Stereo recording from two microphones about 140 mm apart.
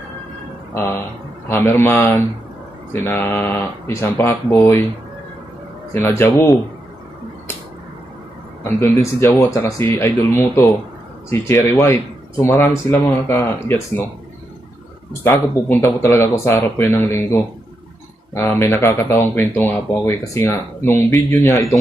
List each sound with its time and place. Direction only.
0.7 s speech: 15° left (ahead or behind)
5.9 s speech: 15° left (ahead or behind)
8.6 s speech: 20° left (ahead or behind)
15.2 s speech: 15° left (ahead or behind)